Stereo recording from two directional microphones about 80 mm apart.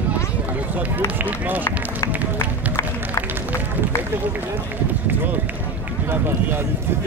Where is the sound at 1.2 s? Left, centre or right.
Right.